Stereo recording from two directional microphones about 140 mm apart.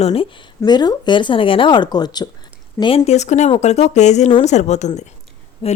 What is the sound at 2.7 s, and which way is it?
Speech, 40° left (ahead or behind).